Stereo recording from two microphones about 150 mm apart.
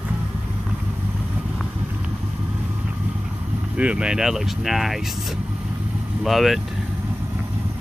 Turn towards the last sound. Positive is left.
turn(degrees=0)  # may be behind; listen again after turning